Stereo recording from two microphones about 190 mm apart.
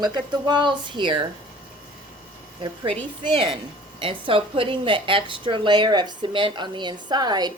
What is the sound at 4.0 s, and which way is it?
A woman's voice, 25° right (ahead or behind).